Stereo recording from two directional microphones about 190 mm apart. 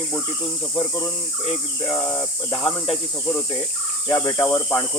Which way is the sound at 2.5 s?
30° left (ahead or behind).